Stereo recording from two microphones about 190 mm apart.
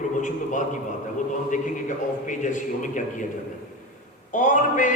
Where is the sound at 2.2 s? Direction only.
40° left (ahead or behind).